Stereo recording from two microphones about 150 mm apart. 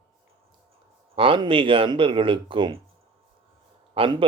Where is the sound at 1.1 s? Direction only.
35° right (ahead or behind).